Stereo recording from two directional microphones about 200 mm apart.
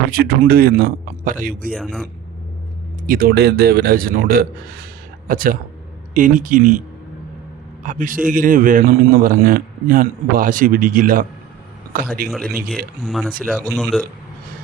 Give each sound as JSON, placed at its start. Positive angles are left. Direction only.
{"t": 0.1, "sound": "a man's voice", "side_deg": -50}
{"t": 1.7, "sound": "speech", "side_deg": 5}
{"t": 3.1, "sound": "a man's voice", "side_deg": -45}
{"t": 7.9, "sound": "a man's voice", "side_deg": -40}
{"t": 12.3, "sound": "speech", "side_deg": 0}